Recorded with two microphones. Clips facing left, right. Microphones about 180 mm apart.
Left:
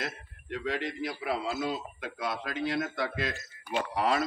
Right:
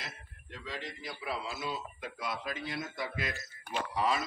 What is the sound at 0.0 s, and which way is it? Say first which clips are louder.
A man's voice: left 10 dB; 65° left (ahead or behind).